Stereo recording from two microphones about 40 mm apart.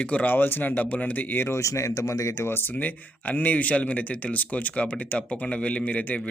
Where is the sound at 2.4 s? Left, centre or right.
Left.